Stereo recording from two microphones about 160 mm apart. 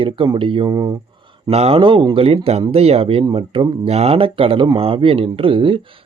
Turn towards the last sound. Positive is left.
turn(degrees=-35)  # may be behind; listen again after turning